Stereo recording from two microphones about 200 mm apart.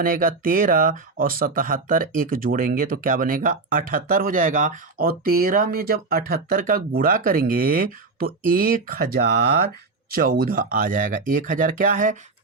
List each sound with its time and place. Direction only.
0.0 s speech: 45° right (ahead or behind)